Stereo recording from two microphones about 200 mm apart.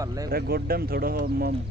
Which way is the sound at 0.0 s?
15° right (ahead or behind).